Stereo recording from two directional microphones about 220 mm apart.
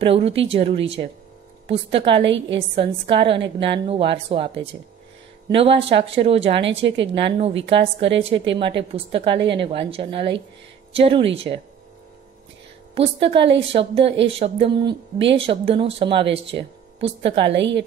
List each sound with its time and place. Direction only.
0.0 s a woman's voice: 25° right (ahead or behind)
12.9 s a woman's voice: 25° right (ahead or behind)
17.4 s a woman's voice: 55° right (ahead or behind)